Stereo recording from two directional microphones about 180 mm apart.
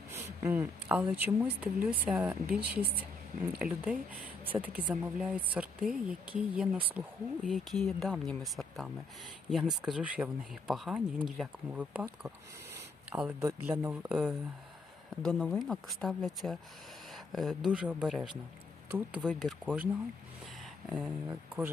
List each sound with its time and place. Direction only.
0.1 s speech: 15° right (ahead or behind)
2.5 s speech: 55° right (ahead or behind)
3.7 s speech: 10° right (ahead or behind)
15.2 s speech: 5° left (ahead or behind)
20.9 s speech: 5° right (ahead or behind)